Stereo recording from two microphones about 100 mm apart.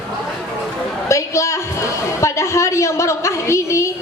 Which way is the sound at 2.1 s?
30° left (ahead or behind).